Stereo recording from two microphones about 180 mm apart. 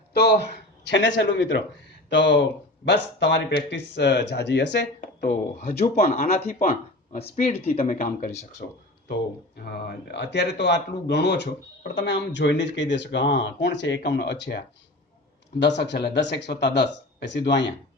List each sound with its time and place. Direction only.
0.1 s a sound: 65° left (ahead or behind)
0.9 s speech: 85° left
4.9 s speech: 45° left (ahead or behind)
6.1 s speech: 40° left (ahead or behind)
6.5 s speech: 50° left (ahead or behind)
8.6 s speech: 60° left (ahead or behind)